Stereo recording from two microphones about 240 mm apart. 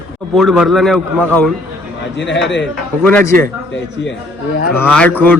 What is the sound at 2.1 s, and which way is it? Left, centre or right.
Speech, left.